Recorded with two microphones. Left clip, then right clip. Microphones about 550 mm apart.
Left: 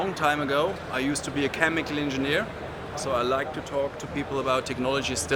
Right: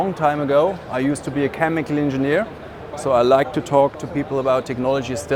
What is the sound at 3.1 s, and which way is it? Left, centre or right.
Speech, right.